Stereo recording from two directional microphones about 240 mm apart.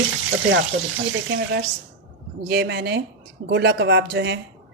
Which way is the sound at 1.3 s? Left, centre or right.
Right.